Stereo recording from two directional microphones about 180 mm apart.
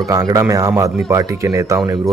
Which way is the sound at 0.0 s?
20° right (ahead or behind).